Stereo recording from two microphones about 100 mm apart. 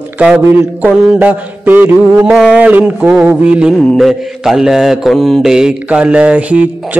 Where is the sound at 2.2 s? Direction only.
10° right (ahead or behind).